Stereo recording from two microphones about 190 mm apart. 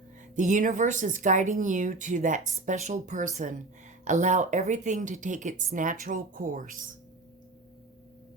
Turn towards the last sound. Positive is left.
turn(degrees=-45)  # may be behind; listen again after turning